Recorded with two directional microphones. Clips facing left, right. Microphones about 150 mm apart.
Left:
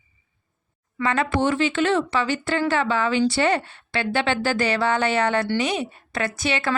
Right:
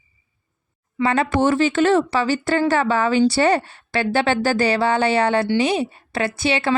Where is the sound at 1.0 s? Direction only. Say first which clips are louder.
Right 4 dB; 35° right (ahead or behind).